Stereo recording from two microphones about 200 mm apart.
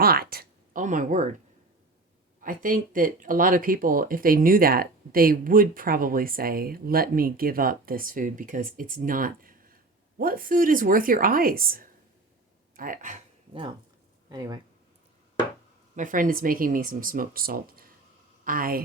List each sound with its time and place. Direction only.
0.0 s speech: 50° right (ahead or behind)
2.4 s speech: 45° right (ahead or behind)
14.3 s speech: 20° right (ahead or behind)
16.0 s speech: 40° right (ahead or behind)